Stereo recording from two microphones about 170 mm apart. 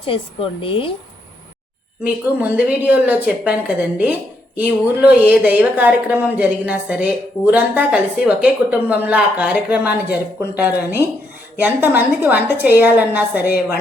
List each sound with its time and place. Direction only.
0.6 s speech: 30° left (ahead or behind)
2.0 s a woman's voice: 10° right (ahead or behind)